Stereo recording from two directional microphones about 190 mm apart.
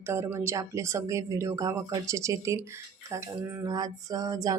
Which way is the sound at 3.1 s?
15° right (ahead or behind).